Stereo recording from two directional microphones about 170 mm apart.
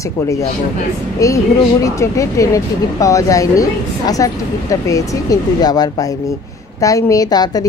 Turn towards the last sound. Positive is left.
turn(degrees=20)  # may be behind; listen again after turning